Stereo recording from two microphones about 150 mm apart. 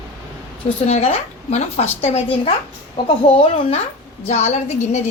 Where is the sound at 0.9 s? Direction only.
45° left (ahead or behind).